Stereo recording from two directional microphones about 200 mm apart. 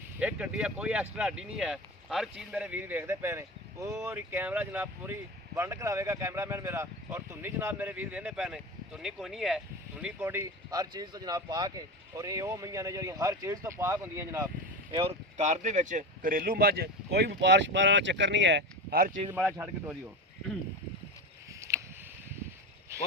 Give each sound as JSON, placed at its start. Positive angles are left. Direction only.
{"t": 0.2, "sound": "speech", "side_deg": -5}
{"t": 14.9, "sound": "speech", "side_deg": -30}
{"t": 19.5, "sound": "speech", "side_deg": -15}